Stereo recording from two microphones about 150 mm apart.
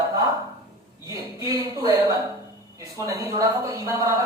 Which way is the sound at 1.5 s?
25° right (ahead or behind).